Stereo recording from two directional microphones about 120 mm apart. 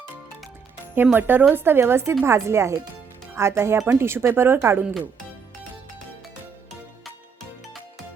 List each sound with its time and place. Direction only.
1.0 s speech: 15° right (ahead or behind)